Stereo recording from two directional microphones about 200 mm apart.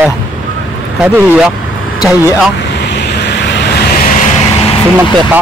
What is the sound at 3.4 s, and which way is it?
Vehicle, 55° left (ahead or behind).